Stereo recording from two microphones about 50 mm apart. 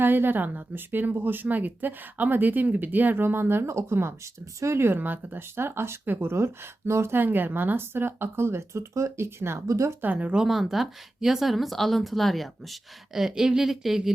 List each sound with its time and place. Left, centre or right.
0.0 s a woman's voice: right
4.6 s speech: right
7.1 s speech: right
10.0 s speech: right
10.3 s speech: centre